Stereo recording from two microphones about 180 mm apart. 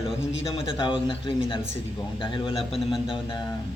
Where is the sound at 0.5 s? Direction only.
30° left (ahead or behind).